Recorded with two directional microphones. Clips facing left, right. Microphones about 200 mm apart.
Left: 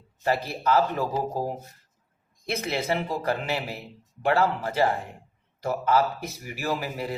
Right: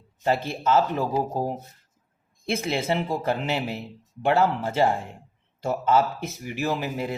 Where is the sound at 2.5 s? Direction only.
25° right (ahead or behind).